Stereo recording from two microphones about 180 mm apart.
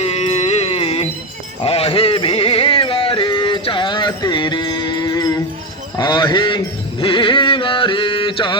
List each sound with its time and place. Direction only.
0.0 s music: 35° left (ahead or behind); by 5.4 s 20° left (ahead or behind)
6.0 s a sound: 25° left (ahead or behind)
7.0 s music: 30° left (ahead or behind)